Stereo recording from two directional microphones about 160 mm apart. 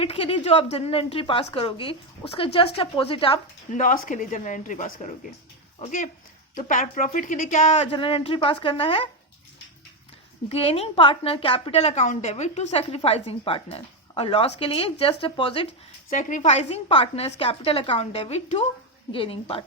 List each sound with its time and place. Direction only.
0.0 s a woman's voice: 35° left (ahead or behind)
3.8 s a woman's voice: 55° left (ahead or behind); by 9.0 s 35° left (ahead or behind)
10.5 s a woman's voice: 35° left (ahead or behind)
16.1 s a woman's voice: 45° left (ahead or behind)